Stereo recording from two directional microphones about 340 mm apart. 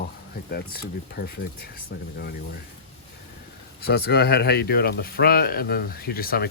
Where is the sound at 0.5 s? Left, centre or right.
Left.